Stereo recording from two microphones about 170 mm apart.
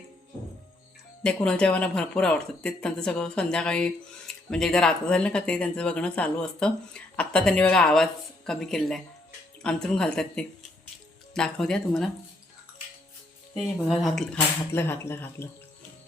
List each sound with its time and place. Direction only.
1.2 s speech: 5° left (ahead or behind)
13.5 s speech: centre (ahead or behind)
14.7 s speech: 15° left (ahead or behind)